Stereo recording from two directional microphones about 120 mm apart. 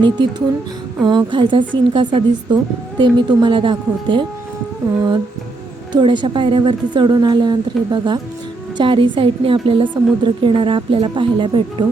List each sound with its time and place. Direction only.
0.0 s a woman's voice: 40° right (ahead or behind)
5.9 s a woman's voice: 40° right (ahead or behind)